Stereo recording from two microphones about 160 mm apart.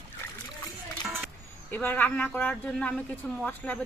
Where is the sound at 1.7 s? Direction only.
10° left (ahead or behind).